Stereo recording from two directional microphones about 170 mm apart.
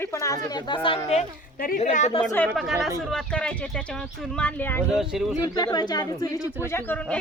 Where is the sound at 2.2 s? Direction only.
10° left (ahead or behind).